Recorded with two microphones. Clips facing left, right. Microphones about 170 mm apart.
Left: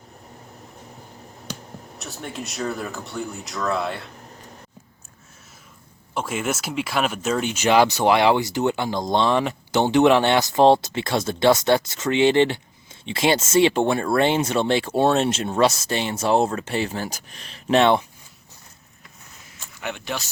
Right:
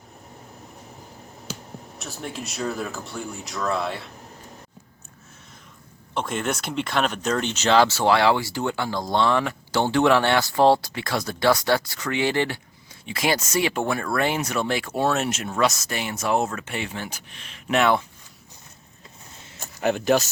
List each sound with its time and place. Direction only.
2.0 s speech: centre (ahead or behind)
6.1 s speech: 5° left (ahead or behind); by 18.0 s 30° left (ahead or behind)
19.5 s a sound: 40° right (ahead or behind)